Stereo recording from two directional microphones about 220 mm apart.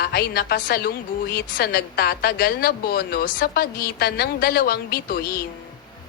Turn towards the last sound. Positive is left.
turn(degrees=45)  # may be behind; listen again after turning